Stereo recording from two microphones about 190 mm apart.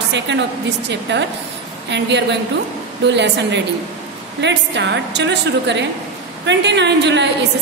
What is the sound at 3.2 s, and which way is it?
A woman's voice, 65° right (ahead or behind).